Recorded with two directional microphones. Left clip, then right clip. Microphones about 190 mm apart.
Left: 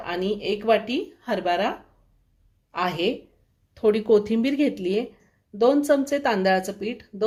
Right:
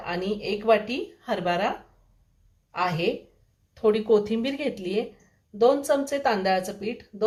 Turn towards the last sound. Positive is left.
turn(degrees=50)  # may be behind; listen again after turning